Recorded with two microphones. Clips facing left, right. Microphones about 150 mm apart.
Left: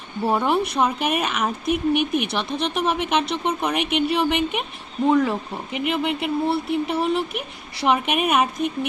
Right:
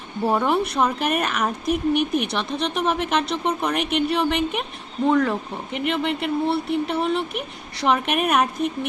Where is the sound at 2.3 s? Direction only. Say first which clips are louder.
Even; centre (ahead or behind).